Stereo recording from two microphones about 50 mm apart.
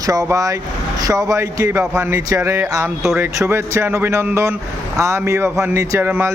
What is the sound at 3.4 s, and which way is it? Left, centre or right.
Speech, right.